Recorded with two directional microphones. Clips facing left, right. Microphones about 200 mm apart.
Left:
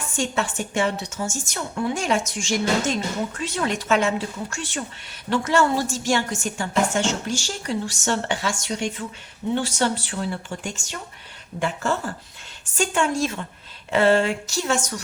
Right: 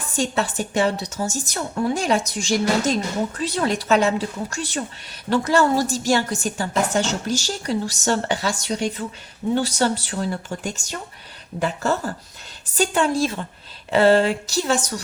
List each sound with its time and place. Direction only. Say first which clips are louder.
0.1 s a woman's voice: right 3 dB; 35° right (ahead or behind)